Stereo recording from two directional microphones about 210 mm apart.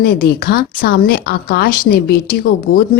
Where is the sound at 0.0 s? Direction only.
45° left (ahead or behind).